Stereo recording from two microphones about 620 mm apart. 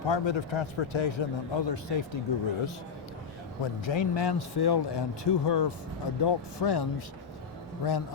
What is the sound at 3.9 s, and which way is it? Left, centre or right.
A man's voice, left.